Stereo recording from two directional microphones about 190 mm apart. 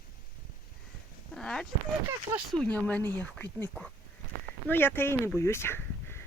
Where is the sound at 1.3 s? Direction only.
5° left (ahead or behind).